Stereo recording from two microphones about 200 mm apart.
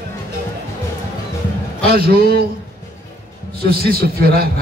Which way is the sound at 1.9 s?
50° right (ahead or behind).